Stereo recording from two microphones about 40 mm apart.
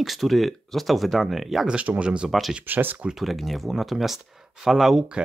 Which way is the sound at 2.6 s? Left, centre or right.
Right.